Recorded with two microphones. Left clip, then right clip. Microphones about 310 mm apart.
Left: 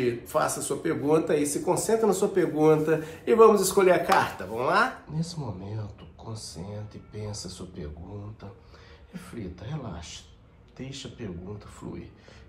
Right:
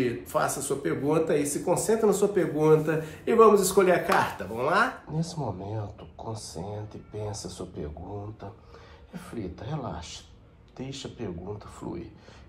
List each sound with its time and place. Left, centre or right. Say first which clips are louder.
0.0 s speech: left 1 dB; centre
10.8 s speech: right 2 dB; right